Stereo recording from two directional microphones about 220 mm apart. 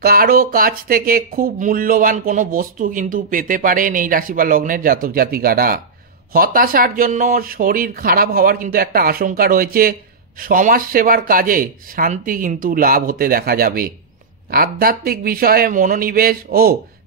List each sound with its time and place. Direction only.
0.0 s speech: 40° right (ahead or behind)